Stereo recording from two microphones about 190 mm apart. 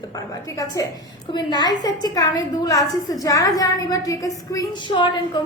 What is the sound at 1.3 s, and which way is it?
A woman's voice, 20° left (ahead or behind).